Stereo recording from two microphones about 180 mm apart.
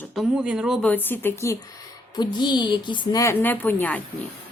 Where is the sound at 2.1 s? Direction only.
25° left (ahead or behind).